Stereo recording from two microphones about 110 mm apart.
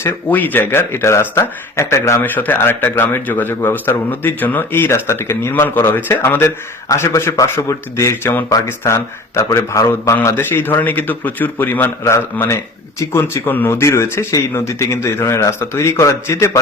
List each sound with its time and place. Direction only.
0.0 s a man's voice: 20° left (ahead or behind)